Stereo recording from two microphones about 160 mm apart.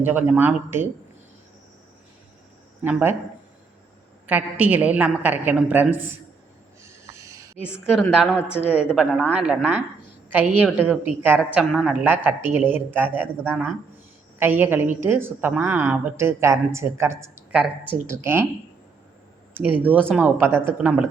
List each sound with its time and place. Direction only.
0.0 s speech: 10° right (ahead or behind)
2.8 s speech: 15° right (ahead or behind)
4.3 s speech: 10° right (ahead or behind)
6.8 s a sound: 20° right (ahead or behind)
7.6 s a woman's voice: 5° right (ahead or behind)
19.8 s speech: 10° right (ahead or behind)